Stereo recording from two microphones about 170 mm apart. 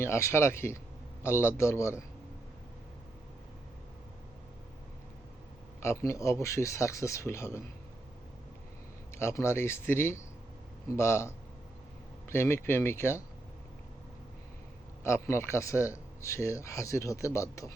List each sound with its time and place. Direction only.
0.0 s speech: 15° left (ahead or behind)
5.8 s speech: 15° left (ahead or behind)
9.1 s speech: 15° left (ahead or behind)
15.0 s speech: 15° left (ahead or behind)